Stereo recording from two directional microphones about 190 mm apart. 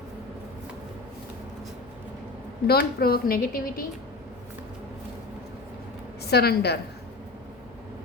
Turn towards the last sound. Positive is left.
turn(degrees=60)  # may be behind; listen again after turning